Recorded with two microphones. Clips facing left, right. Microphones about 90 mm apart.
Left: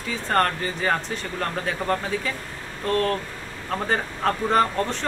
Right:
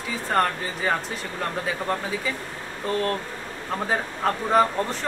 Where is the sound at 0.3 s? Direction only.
5° right (ahead or behind).